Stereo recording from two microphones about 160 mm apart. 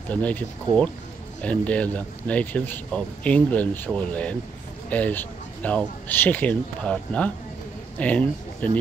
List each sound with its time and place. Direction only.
0.1 s speech: 10° left (ahead or behind)